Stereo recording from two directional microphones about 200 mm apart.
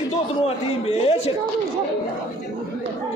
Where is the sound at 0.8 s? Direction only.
30° left (ahead or behind).